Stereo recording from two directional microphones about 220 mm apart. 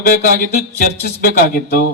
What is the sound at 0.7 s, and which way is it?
Speech, 40° left (ahead or behind).